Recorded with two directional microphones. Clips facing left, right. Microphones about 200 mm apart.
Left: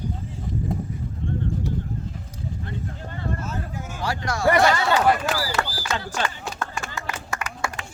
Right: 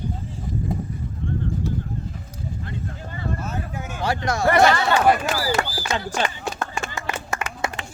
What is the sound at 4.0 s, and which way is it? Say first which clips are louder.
Speech: right 2 dB; 20° right (ahead or behind).